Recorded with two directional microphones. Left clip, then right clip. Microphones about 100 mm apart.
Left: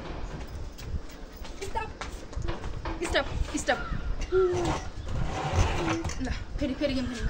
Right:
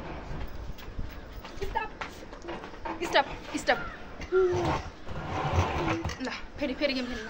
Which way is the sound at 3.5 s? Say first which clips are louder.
Even; 40° left (ahead or behind).